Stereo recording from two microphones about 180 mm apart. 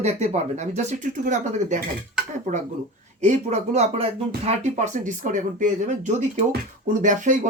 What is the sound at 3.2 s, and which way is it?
Speech, 40° right (ahead or behind).